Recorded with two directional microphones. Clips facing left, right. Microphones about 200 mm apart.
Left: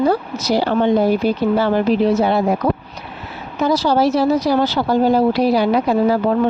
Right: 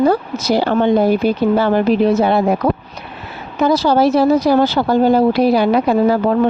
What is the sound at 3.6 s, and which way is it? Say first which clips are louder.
Speech: right 2 dB; 55° right (ahead or behind).